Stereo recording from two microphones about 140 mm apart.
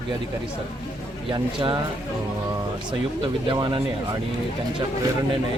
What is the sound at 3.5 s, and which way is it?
Speech, 30° right (ahead or behind).